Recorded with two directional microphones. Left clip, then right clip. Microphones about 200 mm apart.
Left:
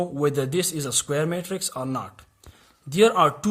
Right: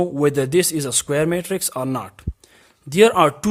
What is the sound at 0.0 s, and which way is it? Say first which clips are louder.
Speech: right 5 dB; 35° right (ahead or behind).